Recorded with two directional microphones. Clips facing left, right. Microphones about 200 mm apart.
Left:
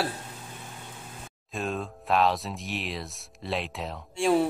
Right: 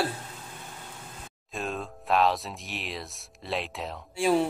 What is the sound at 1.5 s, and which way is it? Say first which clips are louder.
Speech: left 2 dB; centre (ahead or behind).